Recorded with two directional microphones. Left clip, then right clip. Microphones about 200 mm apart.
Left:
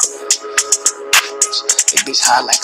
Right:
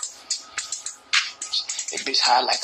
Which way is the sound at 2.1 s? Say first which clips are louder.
Left 4 dB; 20° left (ahead or behind).